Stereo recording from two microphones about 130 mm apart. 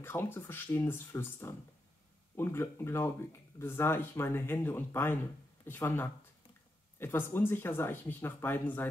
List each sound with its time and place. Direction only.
0.0 s speech: 15° left (ahead or behind)